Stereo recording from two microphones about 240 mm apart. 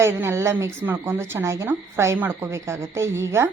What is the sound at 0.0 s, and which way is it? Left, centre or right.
Speech, centre.